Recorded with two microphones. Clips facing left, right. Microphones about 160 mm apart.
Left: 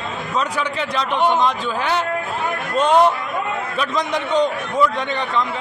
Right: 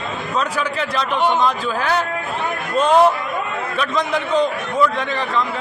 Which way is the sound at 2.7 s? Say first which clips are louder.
Right 1 dB; 5° right (ahead or behind).